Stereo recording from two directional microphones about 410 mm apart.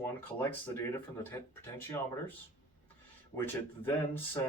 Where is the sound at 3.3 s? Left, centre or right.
Centre.